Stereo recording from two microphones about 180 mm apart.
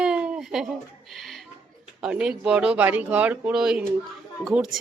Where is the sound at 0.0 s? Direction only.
5° right (ahead or behind).